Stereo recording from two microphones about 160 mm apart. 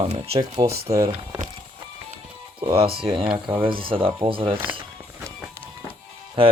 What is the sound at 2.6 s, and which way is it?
Speech, 35° right (ahead or behind).